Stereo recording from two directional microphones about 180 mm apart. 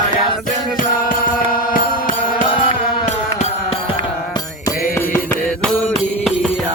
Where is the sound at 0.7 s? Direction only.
50° left (ahead or behind).